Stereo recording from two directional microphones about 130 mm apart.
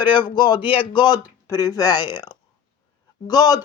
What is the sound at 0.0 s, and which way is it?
Speech, 35° left (ahead or behind).